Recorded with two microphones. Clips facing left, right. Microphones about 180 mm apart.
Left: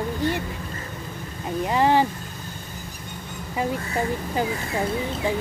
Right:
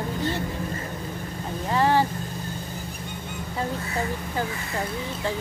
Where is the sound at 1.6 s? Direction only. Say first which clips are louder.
Left 2 dB; 15° left (ahead or behind).